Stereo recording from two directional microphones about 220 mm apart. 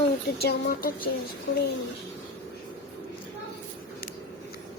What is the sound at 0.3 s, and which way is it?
Speech, 45° left (ahead or behind).